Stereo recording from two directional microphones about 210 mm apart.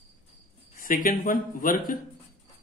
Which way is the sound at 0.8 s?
40° left (ahead or behind).